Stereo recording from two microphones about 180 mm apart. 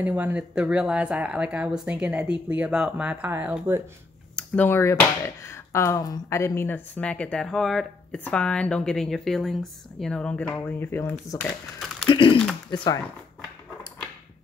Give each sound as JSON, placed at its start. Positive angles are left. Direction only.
{"t": 0.0, "sound": "speech", "side_deg": -10}
{"t": 4.4, "sound": "speech", "side_deg": 10}
{"t": 12.1, "sound": "typing", "side_deg": 30}
{"t": 12.7, "sound": "speech", "side_deg": 25}